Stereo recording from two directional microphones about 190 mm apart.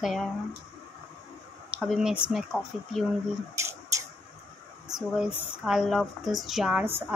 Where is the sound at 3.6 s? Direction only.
15° right (ahead or behind).